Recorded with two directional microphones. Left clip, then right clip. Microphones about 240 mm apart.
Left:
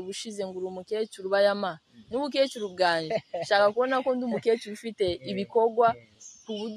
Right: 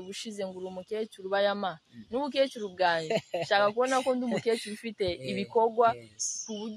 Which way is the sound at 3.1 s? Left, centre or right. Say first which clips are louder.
Even; right.